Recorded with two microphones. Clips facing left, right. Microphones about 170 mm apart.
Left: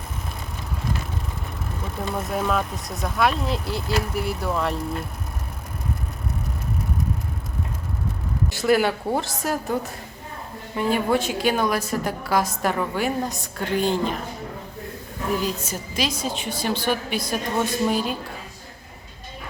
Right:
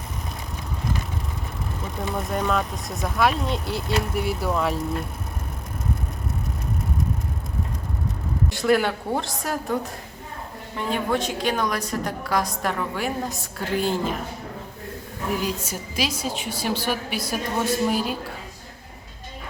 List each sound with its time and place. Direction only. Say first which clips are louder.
2.0 s a woman's voice: even; centre (ahead or behind)
8.4 s a woman's voice: left 1 dB; centre (ahead or behind)
10.8 s a woman's voice: left 3 dB; 5° left (ahead or behind)
15.4 s a woman's voice: left 1 dB; 10° right (ahead or behind)